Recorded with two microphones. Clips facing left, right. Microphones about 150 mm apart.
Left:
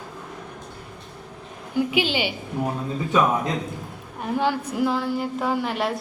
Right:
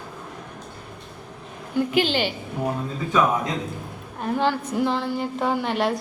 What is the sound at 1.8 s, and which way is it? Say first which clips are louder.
Speech: right 1 dB; 10° left (ahead or behind).